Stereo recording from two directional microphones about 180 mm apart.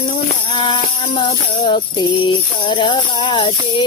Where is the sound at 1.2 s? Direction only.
25° left (ahead or behind).